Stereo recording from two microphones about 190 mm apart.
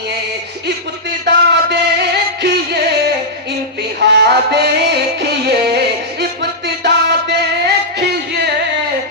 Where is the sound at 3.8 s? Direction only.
60° right (ahead or behind).